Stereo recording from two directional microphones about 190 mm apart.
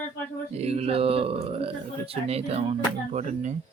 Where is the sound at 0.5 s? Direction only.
35° right (ahead or behind).